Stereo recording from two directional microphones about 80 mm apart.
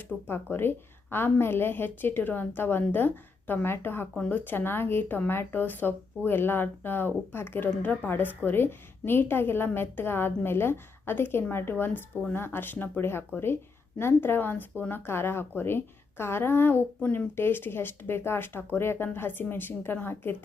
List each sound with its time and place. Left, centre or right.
0.0 s speech: left